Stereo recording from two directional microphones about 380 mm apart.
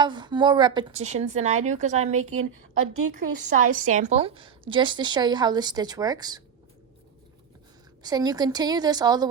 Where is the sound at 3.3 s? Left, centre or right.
Centre.